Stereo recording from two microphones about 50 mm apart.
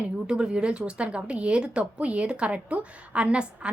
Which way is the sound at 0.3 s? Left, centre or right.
Centre.